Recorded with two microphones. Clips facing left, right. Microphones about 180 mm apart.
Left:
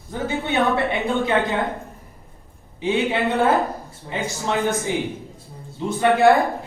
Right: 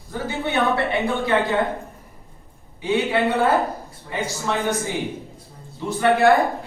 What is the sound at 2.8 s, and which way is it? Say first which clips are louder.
Speech: even; 15° left (ahead or behind).